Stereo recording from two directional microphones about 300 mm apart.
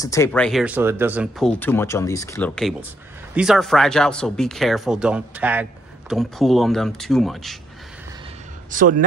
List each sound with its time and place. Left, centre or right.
0.0 s speech: centre
8.6 s speech: right